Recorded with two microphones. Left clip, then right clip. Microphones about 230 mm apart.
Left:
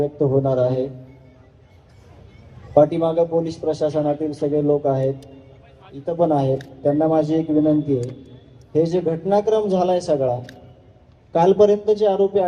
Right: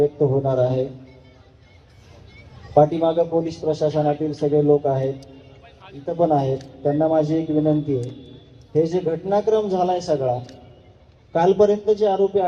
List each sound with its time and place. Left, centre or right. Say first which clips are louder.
0.2 s a man's voice: left 1 dB; left
2.7 s a man's voice: left 1 dB; left
6.1 s a man's voice: left 1 dB; left